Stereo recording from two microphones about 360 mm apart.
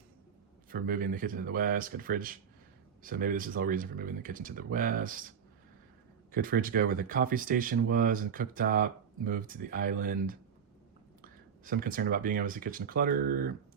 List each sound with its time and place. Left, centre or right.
0.7 s speech: right
6.3 s speech: right
11.2 s speech: right